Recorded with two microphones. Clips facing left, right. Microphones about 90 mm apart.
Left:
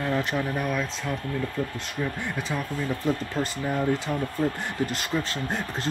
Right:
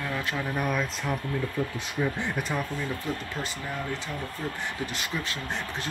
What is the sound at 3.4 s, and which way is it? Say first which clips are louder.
Speech: left 7 dB; 30° left (ahead or behind).